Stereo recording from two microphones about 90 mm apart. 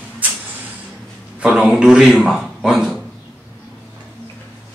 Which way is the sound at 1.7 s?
10° right (ahead or behind).